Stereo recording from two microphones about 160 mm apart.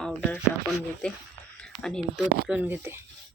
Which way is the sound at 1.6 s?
5° left (ahead or behind).